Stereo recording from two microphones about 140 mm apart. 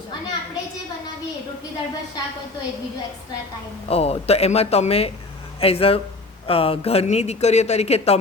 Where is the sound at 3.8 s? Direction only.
45° left (ahead or behind).